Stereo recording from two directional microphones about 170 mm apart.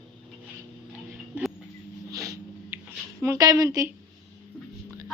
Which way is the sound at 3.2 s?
20° right (ahead or behind).